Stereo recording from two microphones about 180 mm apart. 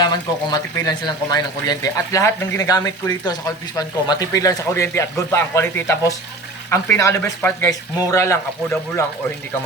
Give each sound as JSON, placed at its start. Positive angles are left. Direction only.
{"t": 0.0, "sound": "speech", "side_deg": 20}